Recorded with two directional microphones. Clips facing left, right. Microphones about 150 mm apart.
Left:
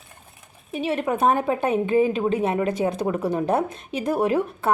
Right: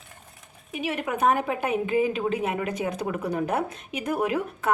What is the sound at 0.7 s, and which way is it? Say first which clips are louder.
A woman's voice: left 5 dB; 30° left (ahead or behind).